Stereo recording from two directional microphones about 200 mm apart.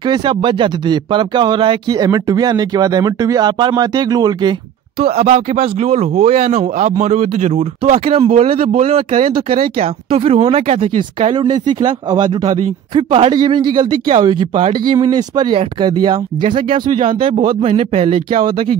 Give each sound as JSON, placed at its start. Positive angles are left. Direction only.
{"t": 0.0, "sound": "speech", "side_deg": -20}
{"t": 5.0, "sound": "speech", "side_deg": -35}